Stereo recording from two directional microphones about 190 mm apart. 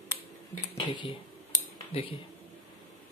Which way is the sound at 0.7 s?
25° left (ahead or behind).